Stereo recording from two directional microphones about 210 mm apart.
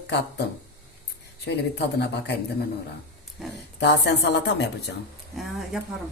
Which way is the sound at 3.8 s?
55° left (ahead or behind).